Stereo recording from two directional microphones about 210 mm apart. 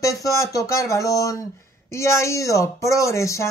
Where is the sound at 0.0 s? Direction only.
15° left (ahead or behind).